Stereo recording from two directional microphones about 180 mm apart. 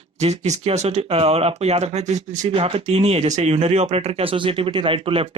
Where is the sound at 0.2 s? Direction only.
40° right (ahead or behind).